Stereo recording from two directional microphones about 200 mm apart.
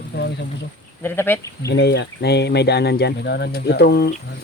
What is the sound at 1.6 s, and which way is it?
Speech, 55° left (ahead or behind).